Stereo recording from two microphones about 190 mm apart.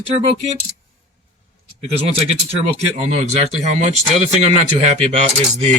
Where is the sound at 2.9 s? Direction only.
35° right (ahead or behind).